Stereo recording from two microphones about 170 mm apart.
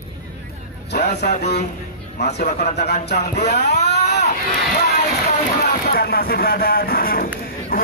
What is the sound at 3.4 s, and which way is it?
Speech, 75° left (ahead or behind).